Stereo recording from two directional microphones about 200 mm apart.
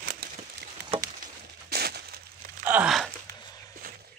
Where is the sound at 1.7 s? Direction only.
50° right (ahead or behind).